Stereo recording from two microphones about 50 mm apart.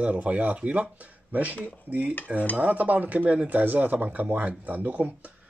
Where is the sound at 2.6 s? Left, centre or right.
Right.